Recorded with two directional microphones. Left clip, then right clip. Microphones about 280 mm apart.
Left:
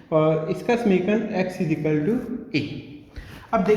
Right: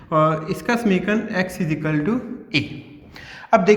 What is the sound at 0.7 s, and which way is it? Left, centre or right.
A man's voice, right.